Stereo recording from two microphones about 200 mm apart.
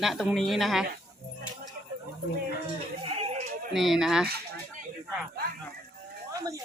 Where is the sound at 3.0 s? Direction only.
30° right (ahead or behind).